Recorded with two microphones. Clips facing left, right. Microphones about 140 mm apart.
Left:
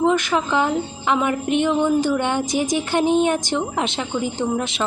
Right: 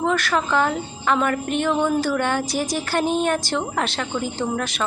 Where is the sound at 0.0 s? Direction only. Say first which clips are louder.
Left 3 dB; 20° left (ahead or behind).